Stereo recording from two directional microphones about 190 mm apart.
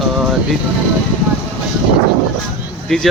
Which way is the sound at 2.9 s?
5° left (ahead or behind).